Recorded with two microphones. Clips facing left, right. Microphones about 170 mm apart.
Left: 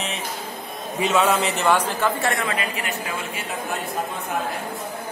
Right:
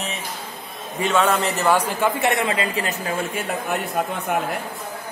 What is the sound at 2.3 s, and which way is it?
Speech, 25° right (ahead or behind).